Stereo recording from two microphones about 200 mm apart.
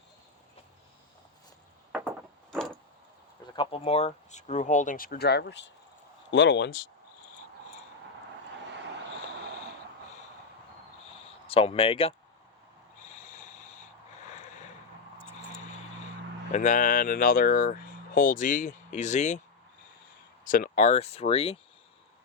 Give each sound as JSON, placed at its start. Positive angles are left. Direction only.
{"t": 1.9, "sound": "a sound", "side_deg": -10}
{"t": 2.5, "sound": "vehicle", "side_deg": 5}
{"t": 3.5, "sound": "speech", "side_deg": 25}
{"t": 11.4, "sound": "speech", "side_deg": 30}
{"t": 13.1, "sound": "sanding", "side_deg": 40}
{"t": 16.5, "sound": "speech", "side_deg": 40}
{"t": 20.4, "sound": "speech", "side_deg": 45}